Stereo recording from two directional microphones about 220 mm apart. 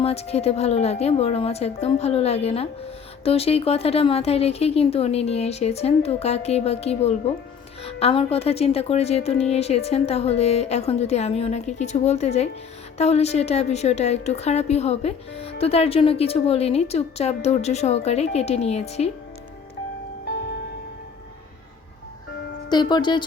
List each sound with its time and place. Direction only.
0.0 s a woman's voice: 30° left (ahead or behind)
22.7 s a woman's voice: 20° left (ahead or behind)